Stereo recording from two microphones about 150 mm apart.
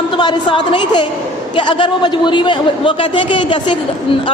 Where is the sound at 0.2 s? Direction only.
35° left (ahead or behind).